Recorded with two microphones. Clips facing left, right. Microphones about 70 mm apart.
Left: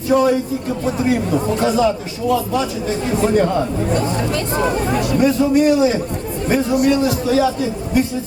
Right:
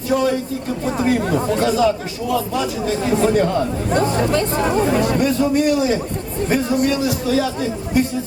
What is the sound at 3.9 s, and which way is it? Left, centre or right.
Speech, right.